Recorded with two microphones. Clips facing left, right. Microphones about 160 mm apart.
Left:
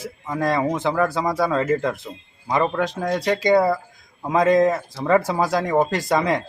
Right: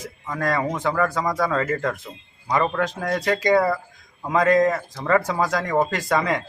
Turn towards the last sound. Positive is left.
turn(degrees=20)  # may be behind; listen again after turning